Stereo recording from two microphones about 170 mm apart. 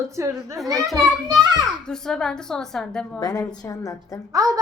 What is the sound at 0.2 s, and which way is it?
Speech, 15° right (ahead or behind).